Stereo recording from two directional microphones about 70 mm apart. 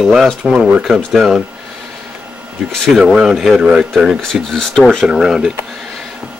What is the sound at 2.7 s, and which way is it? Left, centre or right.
Speech, centre.